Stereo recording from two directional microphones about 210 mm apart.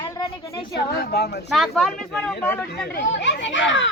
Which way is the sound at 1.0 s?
50° left (ahead or behind).